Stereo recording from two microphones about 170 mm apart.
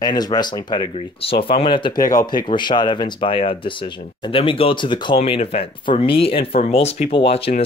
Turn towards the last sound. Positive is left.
turn(degrees=35)  # may be behind; listen again after turning